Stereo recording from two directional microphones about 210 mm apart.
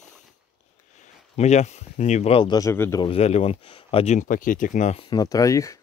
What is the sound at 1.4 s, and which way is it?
Speech, 30° left (ahead or behind).